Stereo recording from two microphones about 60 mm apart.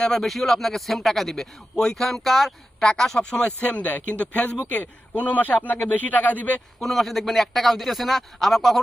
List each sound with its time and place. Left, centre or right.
0.0 s a man's voice: centre
2.8 s a man's voice: centre; by 6.6 s left
6.7 s a man's voice: centre